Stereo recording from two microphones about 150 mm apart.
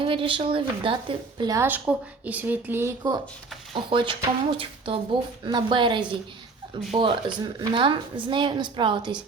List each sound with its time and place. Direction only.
0.0 s a woman's voice: 35° right (ahead or behind)
1.5 s speech: 10° right (ahead or behind)
3.8 s a woman's voice: 35° right (ahead or behind)